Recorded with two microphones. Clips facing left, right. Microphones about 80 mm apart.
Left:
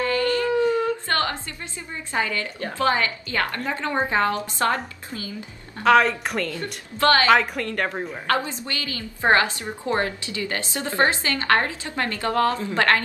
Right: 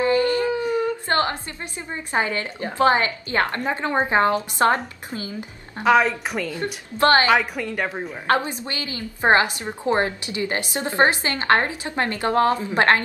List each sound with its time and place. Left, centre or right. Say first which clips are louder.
0.0 s a sound: right 3 dB; right
0.6 s whimper: left 2 dB; centre
1.0 s a sound: right 3 dB; right
2.1 s a woman's voice: right 2 dB; right
5.9 s a woman's voice: even; centre
6.5 s a woman's voice: right 4 dB; right
7.2 s a woman's voice: left 1 dB; centre
8.6 s a woman's voice: right 1 dB; right